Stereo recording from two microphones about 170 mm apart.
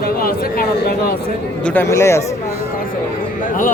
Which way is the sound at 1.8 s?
15° left (ahead or behind).